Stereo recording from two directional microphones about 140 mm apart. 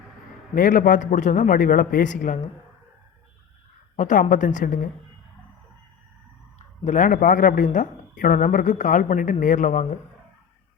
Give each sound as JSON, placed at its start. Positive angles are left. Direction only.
{"t": 0.5, "sound": "speech", "side_deg": 75}
{"t": 3.9, "sound": "speech", "side_deg": 70}
{"t": 6.6, "sound": "speech", "side_deg": 60}